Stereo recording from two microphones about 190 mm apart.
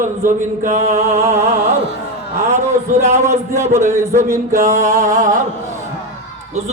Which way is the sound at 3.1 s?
15° right (ahead or behind).